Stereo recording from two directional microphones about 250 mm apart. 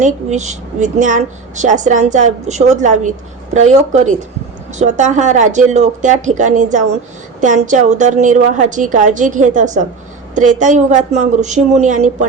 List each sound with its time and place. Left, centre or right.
0.0 s a woman's voice: right